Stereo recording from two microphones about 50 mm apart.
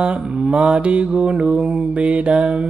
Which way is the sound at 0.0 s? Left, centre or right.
Right.